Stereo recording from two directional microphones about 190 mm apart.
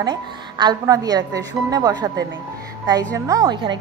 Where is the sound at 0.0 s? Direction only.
20° right (ahead or behind).